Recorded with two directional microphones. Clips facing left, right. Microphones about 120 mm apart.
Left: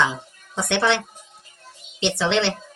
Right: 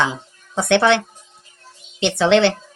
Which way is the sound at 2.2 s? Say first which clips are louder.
Right 8 dB; 60° right (ahead or behind).